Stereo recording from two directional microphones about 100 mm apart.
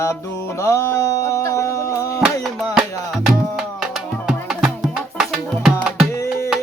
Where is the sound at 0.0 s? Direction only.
30° left (ahead or behind).